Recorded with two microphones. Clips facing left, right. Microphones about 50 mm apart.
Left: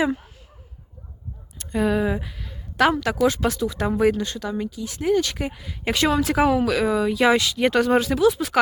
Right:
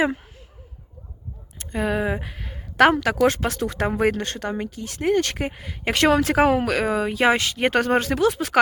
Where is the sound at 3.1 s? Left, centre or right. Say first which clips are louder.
Right 1 dB; right.